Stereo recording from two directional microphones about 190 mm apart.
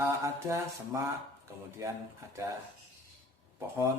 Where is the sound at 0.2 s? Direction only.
15° right (ahead or behind).